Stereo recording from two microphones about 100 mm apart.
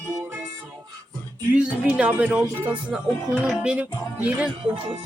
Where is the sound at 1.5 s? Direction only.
15° right (ahead or behind).